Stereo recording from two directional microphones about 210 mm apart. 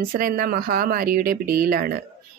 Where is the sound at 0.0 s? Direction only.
40° right (ahead or behind).